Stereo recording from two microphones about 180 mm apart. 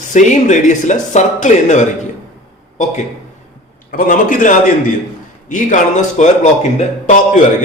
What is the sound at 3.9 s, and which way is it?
Speech, 50° left (ahead or behind).